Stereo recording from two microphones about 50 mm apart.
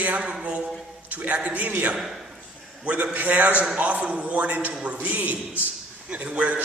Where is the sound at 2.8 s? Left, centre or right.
Right.